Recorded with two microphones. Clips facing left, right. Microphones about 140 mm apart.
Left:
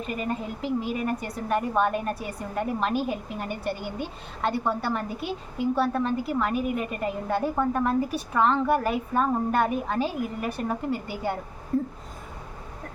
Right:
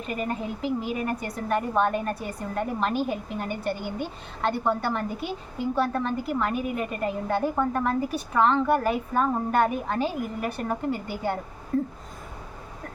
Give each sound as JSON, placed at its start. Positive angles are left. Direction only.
{"t": 0.2, "sound": "a woman's voice", "side_deg": 0}